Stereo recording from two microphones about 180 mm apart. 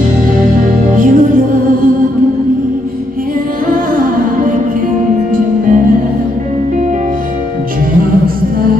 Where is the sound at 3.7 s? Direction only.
50° right (ahead or behind).